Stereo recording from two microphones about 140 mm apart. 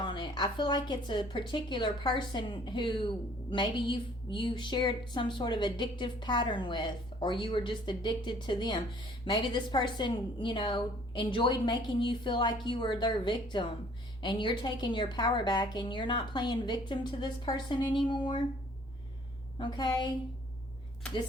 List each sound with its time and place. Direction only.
0.0 s a woman's voice: 35° left (ahead or behind)
19.5 s a woman's voice: 30° left (ahead or behind)